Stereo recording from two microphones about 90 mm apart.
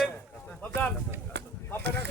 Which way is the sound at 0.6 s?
15° left (ahead or behind).